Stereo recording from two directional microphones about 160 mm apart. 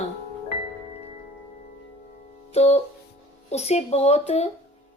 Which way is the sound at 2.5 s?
40° left (ahead or behind).